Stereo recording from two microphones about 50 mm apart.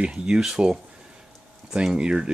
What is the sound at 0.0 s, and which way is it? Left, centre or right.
Speech, centre.